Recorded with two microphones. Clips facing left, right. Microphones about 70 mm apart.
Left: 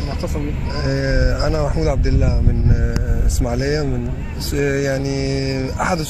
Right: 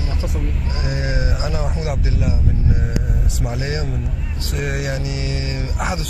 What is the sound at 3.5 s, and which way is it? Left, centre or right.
Speech, centre.